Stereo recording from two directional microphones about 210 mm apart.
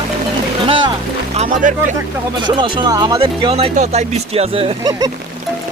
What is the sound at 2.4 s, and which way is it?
Speech, 20° right (ahead or behind).